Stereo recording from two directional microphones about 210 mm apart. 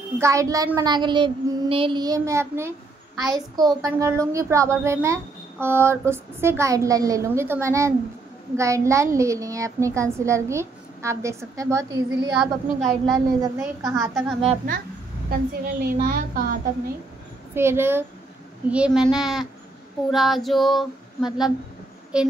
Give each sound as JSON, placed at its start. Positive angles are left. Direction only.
{"t": 0.2, "sound": "a child's voice", "side_deg": -15}
{"t": 12.4, "sound": "female singing", "side_deg": 0}
{"t": 13.6, "sound": "a child's voice", "side_deg": -15}
{"t": 15.2, "sound": "a woman's voice", "side_deg": -45}
{"t": 17.6, "sound": "a child's voice", "side_deg": -10}
{"t": 18.7, "sound": "female singing", "side_deg": -5}